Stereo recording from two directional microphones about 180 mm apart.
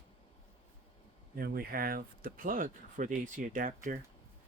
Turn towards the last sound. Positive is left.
turn(degrees=-50)  # may be behind; listen again after turning